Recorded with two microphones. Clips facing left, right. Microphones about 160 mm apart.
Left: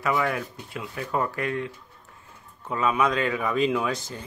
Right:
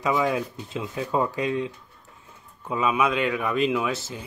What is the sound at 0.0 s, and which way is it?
Speech, 20° right (ahead or behind).